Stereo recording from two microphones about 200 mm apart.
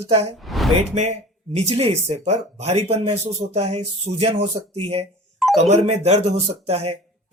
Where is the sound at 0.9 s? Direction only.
30° right (ahead or behind).